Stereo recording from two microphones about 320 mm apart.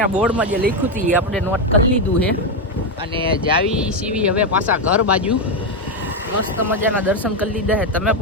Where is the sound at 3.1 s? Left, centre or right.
Centre.